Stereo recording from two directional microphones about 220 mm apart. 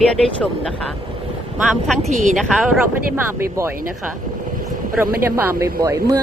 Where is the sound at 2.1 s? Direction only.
35° right (ahead or behind).